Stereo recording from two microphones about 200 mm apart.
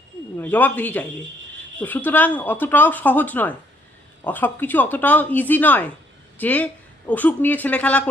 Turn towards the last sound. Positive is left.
turn(degrees=5)  # may be behind; listen again after turning